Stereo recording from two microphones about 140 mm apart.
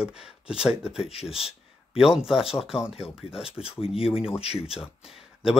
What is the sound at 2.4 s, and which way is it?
Speech, 40° left (ahead or behind).